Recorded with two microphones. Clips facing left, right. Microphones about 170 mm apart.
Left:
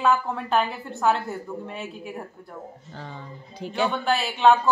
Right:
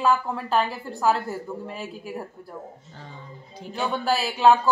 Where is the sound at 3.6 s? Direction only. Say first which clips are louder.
Left 4 dB; 75° left (ahead or behind).